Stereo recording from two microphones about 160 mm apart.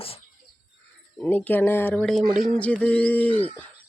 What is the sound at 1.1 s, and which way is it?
Speech, 10° left (ahead or behind).